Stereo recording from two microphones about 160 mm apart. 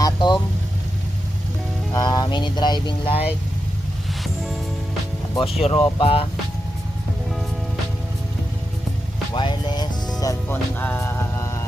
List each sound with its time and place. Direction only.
0.0 s vehicle: 30° left (ahead or behind)
1.9 s speech: 25° left (ahead or behind)
5.3 s speech: 35° left (ahead or behind)
9.3 s vehicle: 30° left (ahead or behind)
10.2 s music: 20° left (ahead or behind)
10.8 s mantra: 10° left (ahead or behind)